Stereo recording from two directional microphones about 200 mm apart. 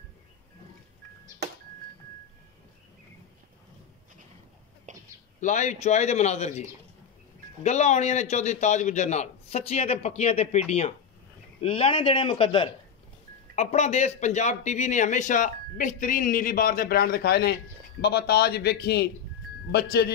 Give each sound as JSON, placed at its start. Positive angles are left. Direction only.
{"t": 4.9, "sound": "a sound", "side_deg": -40}
{"t": 5.4, "sound": "a man's voice", "side_deg": 35}
{"t": 7.6, "sound": "a man's voice", "side_deg": 35}
{"t": 11.6, "sound": "a man's voice", "side_deg": 25}